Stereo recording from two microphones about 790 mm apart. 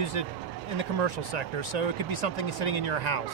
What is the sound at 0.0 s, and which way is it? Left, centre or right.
Speech, right.